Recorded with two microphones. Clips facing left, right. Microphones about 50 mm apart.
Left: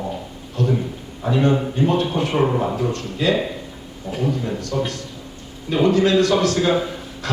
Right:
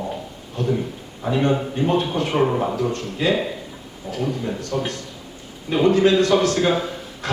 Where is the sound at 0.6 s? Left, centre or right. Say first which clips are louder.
Left 2 dB; right.